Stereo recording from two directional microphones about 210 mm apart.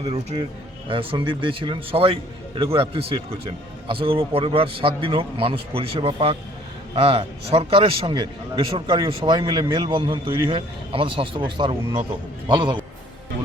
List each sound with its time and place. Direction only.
0.0 s a man's voice: 25° right (ahead or behind)